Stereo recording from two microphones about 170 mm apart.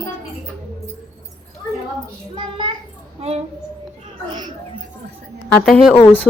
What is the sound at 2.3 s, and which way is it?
A child's voice, 30° right (ahead or behind).